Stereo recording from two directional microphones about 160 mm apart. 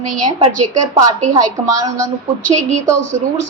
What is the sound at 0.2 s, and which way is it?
Speech, 45° right (ahead or behind).